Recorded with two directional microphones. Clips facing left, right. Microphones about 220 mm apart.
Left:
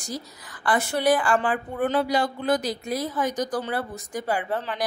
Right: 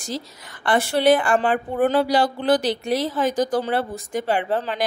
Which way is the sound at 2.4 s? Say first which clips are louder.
Right 5 dB; 90° right.